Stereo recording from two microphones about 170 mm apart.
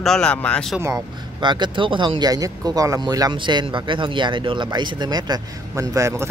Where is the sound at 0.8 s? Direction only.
25° right (ahead or behind).